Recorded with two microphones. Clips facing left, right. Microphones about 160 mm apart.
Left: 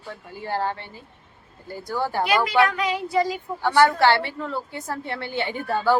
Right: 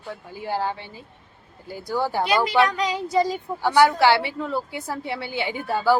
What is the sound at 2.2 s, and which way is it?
Speech, 20° right (ahead or behind).